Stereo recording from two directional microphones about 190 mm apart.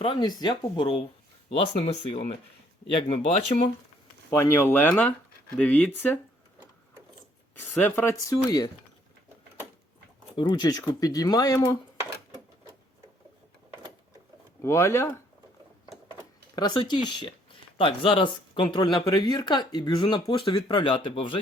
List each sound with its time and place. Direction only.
0.0 s speech: 25° left (ahead or behind)
4.3 s speech: 15° left (ahead or behind)
7.5 s speech: 10° left (ahead or behind)
10.3 s speech: 20° left (ahead or behind)
14.6 s speech: 15° left (ahead or behind)
16.6 s speech: 20° left (ahead or behind)